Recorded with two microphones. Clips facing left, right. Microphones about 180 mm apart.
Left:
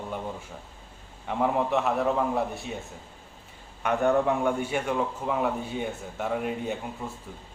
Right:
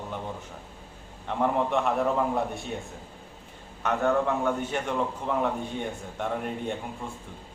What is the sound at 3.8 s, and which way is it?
A man's voice, 15° left (ahead or behind).